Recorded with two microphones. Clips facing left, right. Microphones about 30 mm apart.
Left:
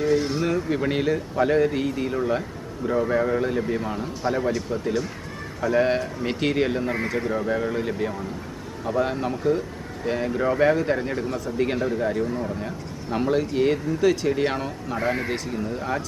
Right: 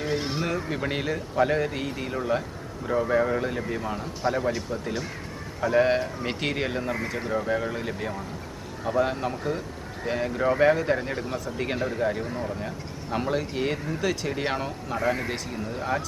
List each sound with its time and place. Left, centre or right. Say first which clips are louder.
0.0 s a sound: left 6 dB; centre
0.4 s speech: left 5 dB; centre
5.5 s speech: left 1 dB; centre
14.9 s speech: left 1 dB; centre
15.3 s speech: left 4 dB; centre